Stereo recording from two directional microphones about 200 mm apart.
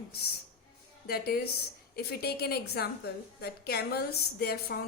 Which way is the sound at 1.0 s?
50° left (ahead or behind).